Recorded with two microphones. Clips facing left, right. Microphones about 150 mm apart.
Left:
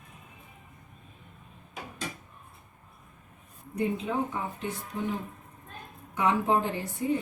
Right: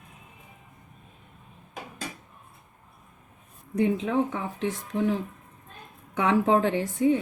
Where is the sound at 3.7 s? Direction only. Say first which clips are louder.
Right 5 dB; 90° right.